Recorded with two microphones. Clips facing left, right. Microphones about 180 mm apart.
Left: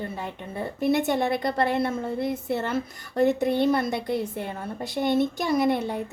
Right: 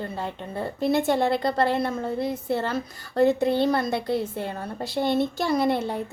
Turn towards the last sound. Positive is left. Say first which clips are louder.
# even
turn(degrees=20)  # may be behind; listen again after turning